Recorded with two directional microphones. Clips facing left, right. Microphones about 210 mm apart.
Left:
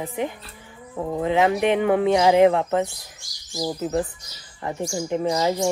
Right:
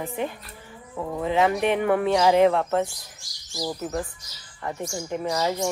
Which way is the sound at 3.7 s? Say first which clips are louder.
Left 5 dB; 30° left (ahead or behind).